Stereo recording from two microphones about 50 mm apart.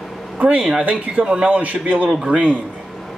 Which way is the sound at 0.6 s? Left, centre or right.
Centre.